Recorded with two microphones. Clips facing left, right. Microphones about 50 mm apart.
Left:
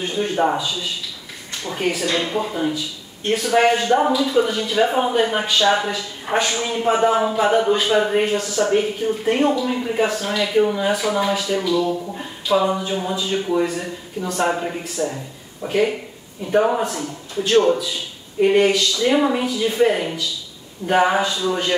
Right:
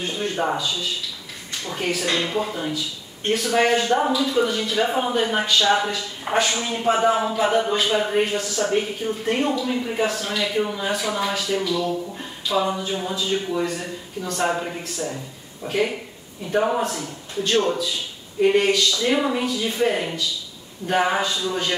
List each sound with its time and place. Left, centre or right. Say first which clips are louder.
0.0 s a man's voice: left 4 dB; centre
20.8 s a man's voice: left 4 dB; centre